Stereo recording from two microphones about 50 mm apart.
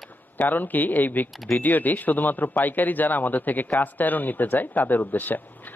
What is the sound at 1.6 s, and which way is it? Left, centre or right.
Speech, left.